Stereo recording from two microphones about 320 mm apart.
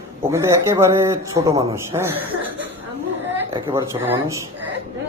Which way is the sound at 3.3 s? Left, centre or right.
Centre.